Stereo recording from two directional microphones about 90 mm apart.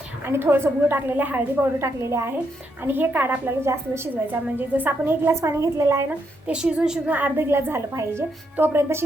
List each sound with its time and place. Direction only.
0.3 s a woman's voice: 25° right (ahead or behind)
1.8 s a woman's voice: 30° right (ahead or behind)
6.1 s a woman's voice: 10° right (ahead or behind)
7.1 s a woman's voice: 20° right (ahead or behind)